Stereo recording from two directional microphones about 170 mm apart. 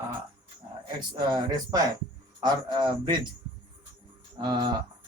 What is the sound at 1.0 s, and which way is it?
A man's voice, 25° right (ahead or behind).